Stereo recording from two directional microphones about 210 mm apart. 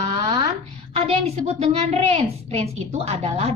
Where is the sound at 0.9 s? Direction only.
30° right (ahead or behind).